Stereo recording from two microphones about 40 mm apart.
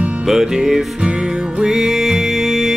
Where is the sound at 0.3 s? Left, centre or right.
Centre.